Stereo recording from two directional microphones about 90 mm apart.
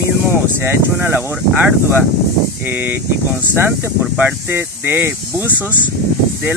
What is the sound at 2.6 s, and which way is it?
Speech, 25° right (ahead or behind).